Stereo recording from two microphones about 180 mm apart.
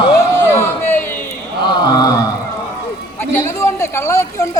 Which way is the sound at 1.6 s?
25° left (ahead or behind).